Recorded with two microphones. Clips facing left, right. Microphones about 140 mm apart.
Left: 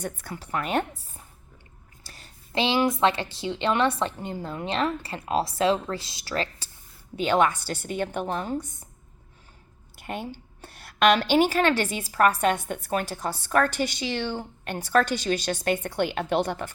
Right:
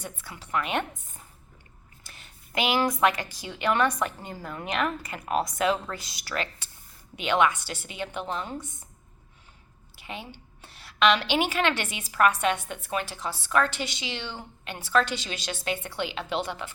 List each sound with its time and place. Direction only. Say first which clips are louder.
0.0 s a woman's voice: left 6 dB; 50° left (ahead or behind)
10.0 s a woman's voice: left 6 dB; 50° left (ahead or behind)